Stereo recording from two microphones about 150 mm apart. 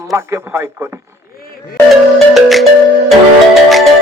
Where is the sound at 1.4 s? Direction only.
80° left.